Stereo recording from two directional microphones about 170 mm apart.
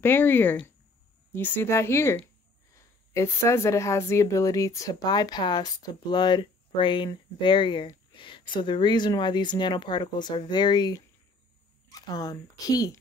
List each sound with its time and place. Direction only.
0.0 s a woman's voice: 10° left (ahead or behind)